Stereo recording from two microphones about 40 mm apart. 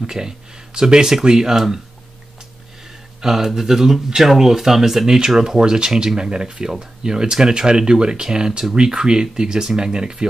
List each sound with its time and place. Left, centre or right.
0.0 s speech: centre
3.2 s speech: centre